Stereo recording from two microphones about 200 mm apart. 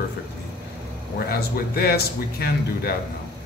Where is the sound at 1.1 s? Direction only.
50° left (ahead or behind).